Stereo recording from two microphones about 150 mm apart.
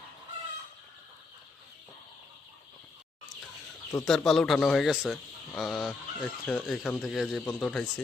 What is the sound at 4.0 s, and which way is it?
Speech, centre (ahead or behind).